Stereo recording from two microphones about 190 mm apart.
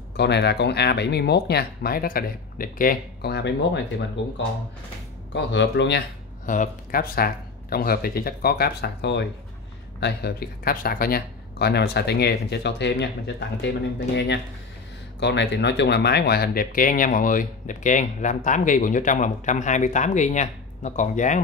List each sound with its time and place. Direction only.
0.2 s speech: 60° left (ahead or behind)
5.3 s speech: 65° left (ahead or behind)
6.4 s speech: 45° left (ahead or behind)